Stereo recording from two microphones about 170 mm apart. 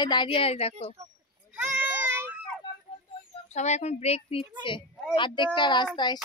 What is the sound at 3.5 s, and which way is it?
A child's voice, 40° left (ahead or behind).